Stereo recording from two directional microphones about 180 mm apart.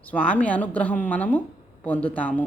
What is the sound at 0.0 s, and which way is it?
Speech, 10° left (ahead or behind).